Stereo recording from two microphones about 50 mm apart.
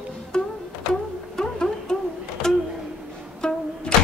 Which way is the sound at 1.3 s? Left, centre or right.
Centre.